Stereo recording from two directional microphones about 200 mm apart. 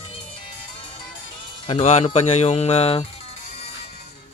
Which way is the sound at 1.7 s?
30° left (ahead or behind).